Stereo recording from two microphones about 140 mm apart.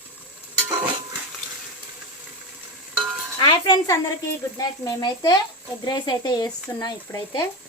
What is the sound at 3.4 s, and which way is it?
Music, 30° left (ahead or behind).